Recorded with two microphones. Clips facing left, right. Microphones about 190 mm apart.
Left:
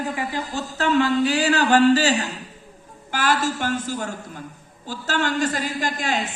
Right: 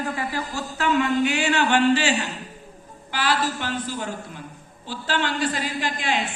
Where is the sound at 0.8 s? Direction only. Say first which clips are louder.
Left 2 dB; 35° left (ahead or behind).